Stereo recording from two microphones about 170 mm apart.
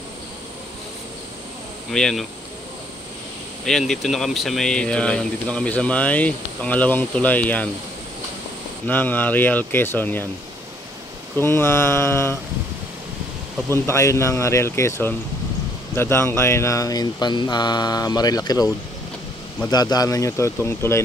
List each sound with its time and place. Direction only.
1.9 s speech: 5° left (ahead or behind)
3.6 s speech: centre (ahead or behind)
8.8 s speech: 10° left (ahead or behind)
11.3 s speech: 15° left (ahead or behind)
13.8 s speech: 15° left (ahead or behind)
19.7 s speech: 25° left (ahead or behind)